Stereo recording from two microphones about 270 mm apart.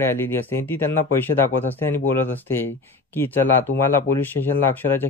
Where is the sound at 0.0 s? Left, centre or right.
Centre.